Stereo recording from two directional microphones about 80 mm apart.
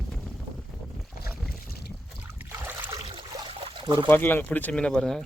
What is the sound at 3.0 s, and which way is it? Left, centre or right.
Trickle, right.